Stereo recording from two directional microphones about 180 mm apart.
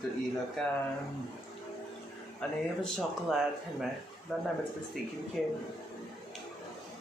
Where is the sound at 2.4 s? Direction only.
5° left (ahead or behind).